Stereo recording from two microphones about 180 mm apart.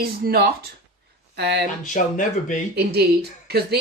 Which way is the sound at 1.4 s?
70° right (ahead or behind).